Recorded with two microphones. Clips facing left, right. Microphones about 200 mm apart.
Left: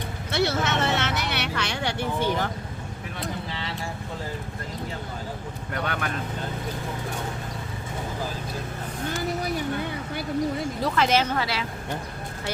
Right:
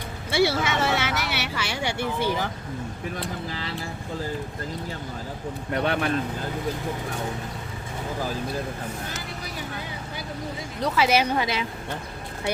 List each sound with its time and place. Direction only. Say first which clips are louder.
0.3 s a sound: right 2 dB; 10° right (ahead or behind)
5.7 s speech: right 5 dB; 25° right (ahead or behind)
10.9 s speech: right 2 dB; 10° right (ahead or behind)